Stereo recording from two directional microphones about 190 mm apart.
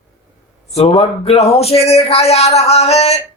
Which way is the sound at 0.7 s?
30° left (ahead or behind).